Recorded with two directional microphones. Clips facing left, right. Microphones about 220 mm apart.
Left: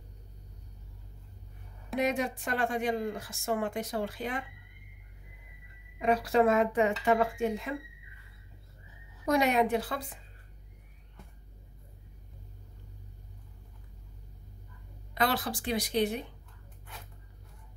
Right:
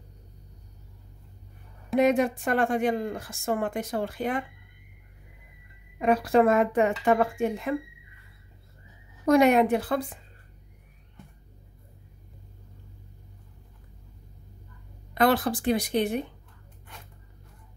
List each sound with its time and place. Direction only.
2.0 s a woman's voice: 55° right (ahead or behind)
5.9 s speech: 55° right (ahead or behind)
9.2 s speech: 55° right (ahead or behind)
15.1 s a woman's voice: 50° right (ahead or behind)